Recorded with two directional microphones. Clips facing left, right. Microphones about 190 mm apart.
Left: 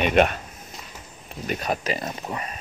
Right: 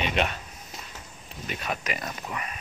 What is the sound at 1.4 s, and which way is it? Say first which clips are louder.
Speech: left 6 dB; 35° left (ahead or behind).